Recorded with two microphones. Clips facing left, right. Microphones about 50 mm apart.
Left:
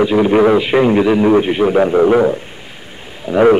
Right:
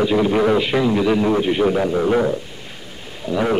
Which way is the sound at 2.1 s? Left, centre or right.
Left.